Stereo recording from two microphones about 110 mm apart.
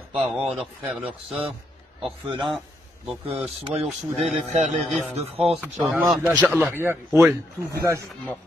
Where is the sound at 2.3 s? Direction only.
50° right (ahead or behind).